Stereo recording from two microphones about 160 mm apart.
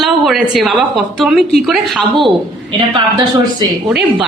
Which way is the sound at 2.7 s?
30° right (ahead or behind).